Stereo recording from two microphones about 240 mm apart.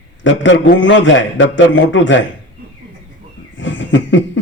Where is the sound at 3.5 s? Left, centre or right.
Left.